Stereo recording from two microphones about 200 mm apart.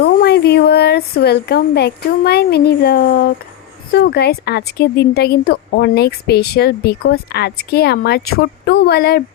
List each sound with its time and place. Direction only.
0.0 s speech: 55° left (ahead or behind)